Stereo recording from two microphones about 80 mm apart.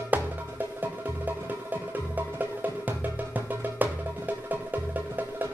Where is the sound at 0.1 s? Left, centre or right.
Right.